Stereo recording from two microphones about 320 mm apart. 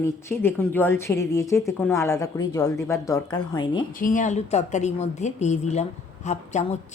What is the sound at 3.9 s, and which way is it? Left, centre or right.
A woman's voice, left.